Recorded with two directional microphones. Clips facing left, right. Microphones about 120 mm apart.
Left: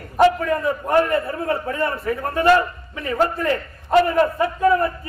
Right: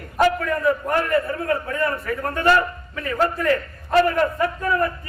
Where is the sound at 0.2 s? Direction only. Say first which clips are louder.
Left 3 dB; 25° left (ahead or behind).